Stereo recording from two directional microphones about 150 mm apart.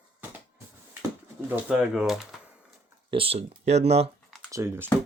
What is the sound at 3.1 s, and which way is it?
Speech, 40° right (ahead or behind).